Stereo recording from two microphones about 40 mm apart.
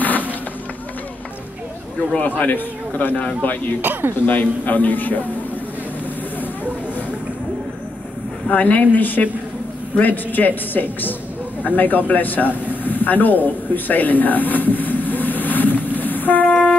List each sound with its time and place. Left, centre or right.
0.0 s a sound: left
2.2 s a man's voice: left
3.8 s speech: right
4.3 s a man's voice: left
8.5 s a man's voice: left
11.6 s a sound: left